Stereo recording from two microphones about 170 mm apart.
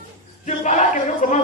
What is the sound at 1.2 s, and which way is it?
Chatter, 45° left (ahead or behind).